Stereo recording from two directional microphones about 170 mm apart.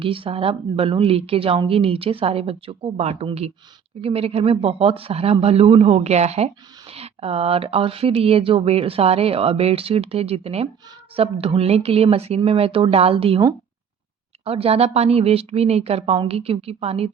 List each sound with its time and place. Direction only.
0.0 s speech: 30° right (ahead or behind)